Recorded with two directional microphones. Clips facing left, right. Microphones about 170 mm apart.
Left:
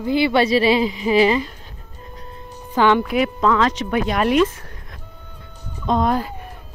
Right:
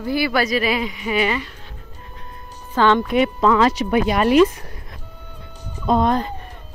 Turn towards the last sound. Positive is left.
turn(degrees=5)  # may be behind; listen again after turning